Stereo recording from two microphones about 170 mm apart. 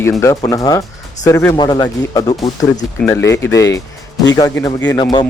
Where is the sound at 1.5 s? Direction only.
25° left (ahead or behind).